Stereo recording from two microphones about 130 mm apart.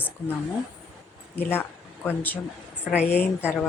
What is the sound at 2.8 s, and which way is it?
Speech, 10° right (ahead or behind).